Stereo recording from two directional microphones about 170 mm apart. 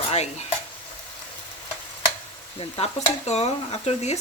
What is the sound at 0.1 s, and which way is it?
Stir, 40° left (ahead or behind).